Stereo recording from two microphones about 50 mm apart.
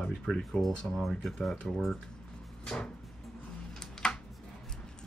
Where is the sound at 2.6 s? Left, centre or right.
Centre.